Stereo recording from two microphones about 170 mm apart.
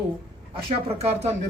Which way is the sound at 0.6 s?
35° right (ahead or behind).